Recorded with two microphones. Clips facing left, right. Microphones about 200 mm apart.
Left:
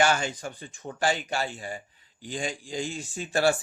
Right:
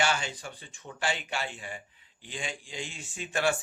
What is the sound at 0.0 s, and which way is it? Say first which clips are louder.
Speech: left 5 dB; 45° left (ahead or behind).